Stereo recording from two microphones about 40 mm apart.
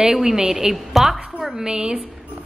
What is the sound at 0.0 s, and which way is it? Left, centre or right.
Speech, centre.